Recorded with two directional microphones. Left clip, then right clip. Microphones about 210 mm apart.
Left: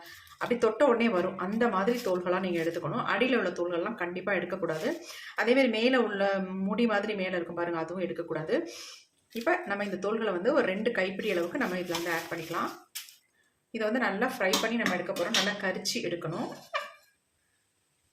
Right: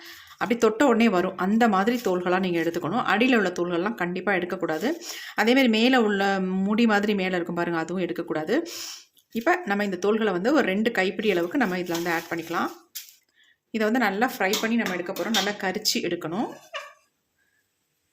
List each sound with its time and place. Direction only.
0.3 s speech: 45° right (ahead or behind)
13.7 s speech: 45° right (ahead or behind)